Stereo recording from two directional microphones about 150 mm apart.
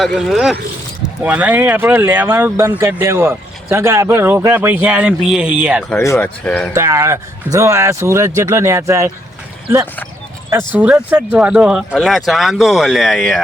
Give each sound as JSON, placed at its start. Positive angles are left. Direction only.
{"t": 0.0, "sound": "speech", "side_deg": 0}
{"t": 6.0, "sound": "speech", "side_deg": 15}
{"t": 6.7, "sound": "speech", "side_deg": -15}
{"t": 10.8, "sound": "speech", "side_deg": -10}